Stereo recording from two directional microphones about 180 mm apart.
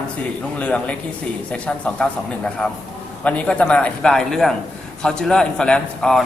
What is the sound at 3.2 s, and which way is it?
A man's voice, 5° left (ahead or behind).